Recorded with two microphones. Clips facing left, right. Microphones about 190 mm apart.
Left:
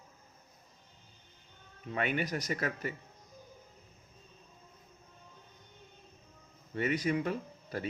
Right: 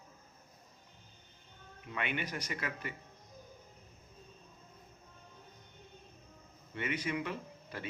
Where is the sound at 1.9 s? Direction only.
40° left (ahead or behind).